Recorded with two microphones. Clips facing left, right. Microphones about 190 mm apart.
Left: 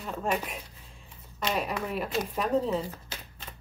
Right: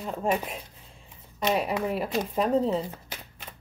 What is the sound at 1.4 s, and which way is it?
A woman's voice, 20° right (ahead or behind).